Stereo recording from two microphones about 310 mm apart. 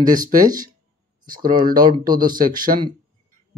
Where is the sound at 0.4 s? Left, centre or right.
Centre.